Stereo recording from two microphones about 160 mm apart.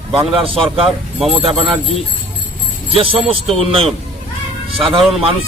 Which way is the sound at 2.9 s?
35° right (ahead or behind).